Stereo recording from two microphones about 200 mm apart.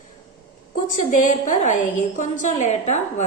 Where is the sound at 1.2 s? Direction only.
40° left (ahead or behind).